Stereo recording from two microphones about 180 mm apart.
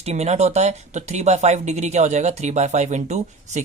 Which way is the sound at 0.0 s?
35° right (ahead or behind).